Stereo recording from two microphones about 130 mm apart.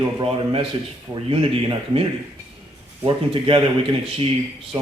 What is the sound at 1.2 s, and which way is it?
Speech, 45° right (ahead or behind).